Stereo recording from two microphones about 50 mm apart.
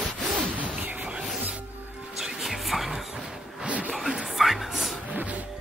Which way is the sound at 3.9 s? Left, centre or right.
Centre.